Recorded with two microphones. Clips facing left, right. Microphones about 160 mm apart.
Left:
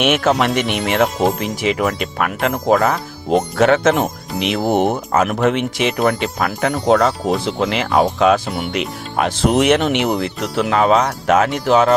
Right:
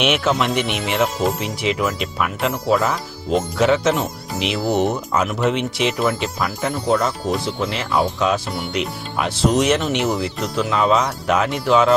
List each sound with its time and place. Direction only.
0.0 s speech: 50° left (ahead or behind)